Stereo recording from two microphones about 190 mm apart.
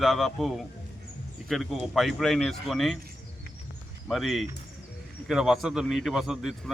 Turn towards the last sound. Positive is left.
turn(degrees=0)  # may be behind; listen again after turning